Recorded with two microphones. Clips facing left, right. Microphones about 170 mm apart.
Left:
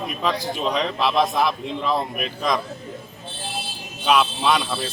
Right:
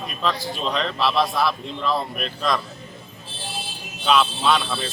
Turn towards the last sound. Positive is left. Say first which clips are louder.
# even
turn(degrees=5)  # may be behind; listen again after turning